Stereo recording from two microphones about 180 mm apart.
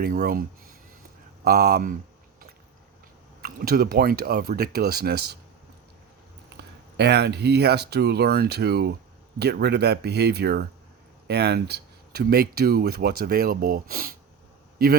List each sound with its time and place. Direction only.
0.0 s speech: 55° right (ahead or behind)
3.4 s speech: 55° right (ahead or behind)
6.6 s a sound: 70° right (ahead or behind)
6.9 s speech: 65° right (ahead or behind)